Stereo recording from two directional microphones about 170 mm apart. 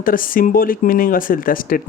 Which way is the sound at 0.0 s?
55° left (ahead or behind).